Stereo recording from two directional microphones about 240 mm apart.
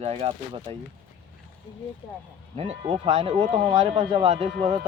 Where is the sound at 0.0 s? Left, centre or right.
Right.